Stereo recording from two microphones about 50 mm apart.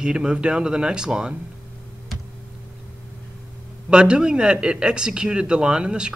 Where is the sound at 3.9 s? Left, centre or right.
Centre.